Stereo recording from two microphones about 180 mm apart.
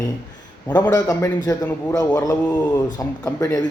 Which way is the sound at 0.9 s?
20° left (ahead or behind).